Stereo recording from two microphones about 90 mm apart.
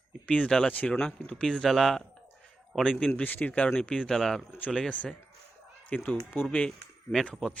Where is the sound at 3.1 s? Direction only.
20° left (ahead or behind); by 4.4 s 5° left (ahead or behind).